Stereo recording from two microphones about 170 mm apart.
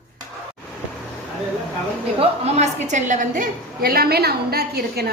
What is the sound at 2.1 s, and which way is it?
A woman's voice, 40° right (ahead or behind).